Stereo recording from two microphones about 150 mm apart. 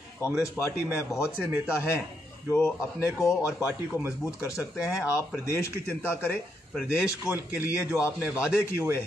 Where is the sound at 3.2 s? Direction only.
20° left (ahead or behind).